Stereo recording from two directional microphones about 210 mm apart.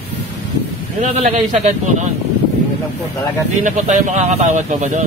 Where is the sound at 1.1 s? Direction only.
30° right (ahead or behind).